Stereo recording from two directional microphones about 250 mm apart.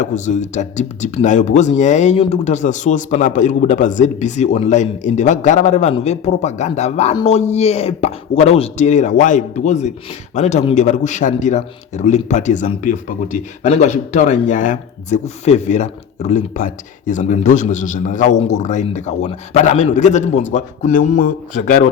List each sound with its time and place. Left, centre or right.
0.0 s speech: left